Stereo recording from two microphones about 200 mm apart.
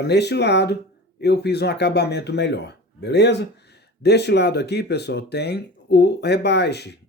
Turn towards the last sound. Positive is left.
turn(degrees=55)  # may be behind; listen again after turning